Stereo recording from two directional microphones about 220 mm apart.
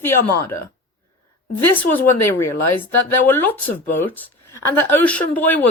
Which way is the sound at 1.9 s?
10° left (ahead or behind).